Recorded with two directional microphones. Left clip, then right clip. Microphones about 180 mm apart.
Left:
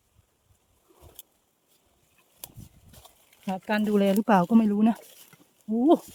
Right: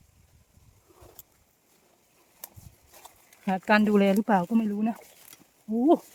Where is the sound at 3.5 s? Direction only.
35° right (ahead or behind).